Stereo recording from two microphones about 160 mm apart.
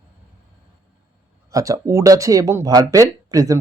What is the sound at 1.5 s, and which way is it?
Speech, 20° right (ahead or behind).